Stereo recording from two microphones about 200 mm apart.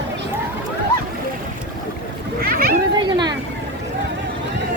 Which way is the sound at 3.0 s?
20° right (ahead or behind).